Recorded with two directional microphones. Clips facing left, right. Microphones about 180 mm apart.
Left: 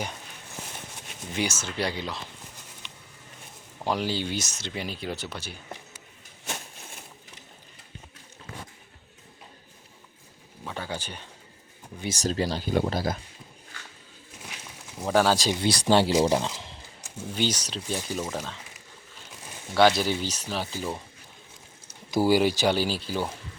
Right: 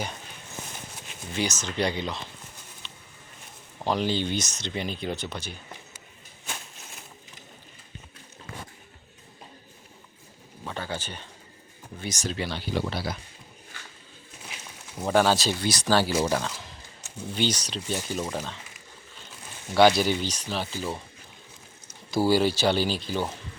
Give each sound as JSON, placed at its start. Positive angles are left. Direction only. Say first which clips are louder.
{"t": 1.3, "sound": "speech", "louder": "even", "side_deg": 10}
{"t": 2.8, "sound": "patter", "louder": "even", "side_deg": 15}
{"t": 3.8, "sound": "speech", "louder": "right 2 dB", "side_deg": 10}
{"t": 10.6, "sound": "a sound", "louder": "right 1 dB", "side_deg": 5}
{"t": 12.0, "sound": "speech", "louder": "left 4 dB", "side_deg": 35}
{"t": 15.0, "sound": "speech", "louder": "even", "side_deg": 0}
{"t": 17.2, "sound": "speech", "louder": "right 1 dB", "side_deg": 10}
{"t": 19.7, "sound": "speech", "louder": "right 2 dB", "side_deg": 0}
{"t": 22.1, "sound": "speech", "louder": "left 1 dB", "side_deg": 15}